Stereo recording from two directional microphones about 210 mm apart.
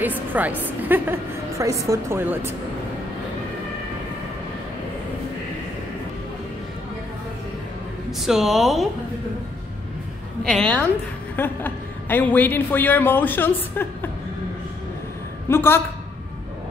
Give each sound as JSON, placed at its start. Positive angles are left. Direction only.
{"t": 0.0, "sound": "a woman's voice", "side_deg": -10}
{"t": 8.3, "sound": "speech", "side_deg": 0}
{"t": 10.4, "sound": "a woman's voice", "side_deg": 5}
{"t": 15.4, "sound": "a woman's voice", "side_deg": 10}